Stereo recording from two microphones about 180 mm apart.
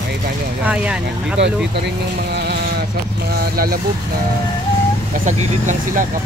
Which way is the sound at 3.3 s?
60° right (ahead or behind).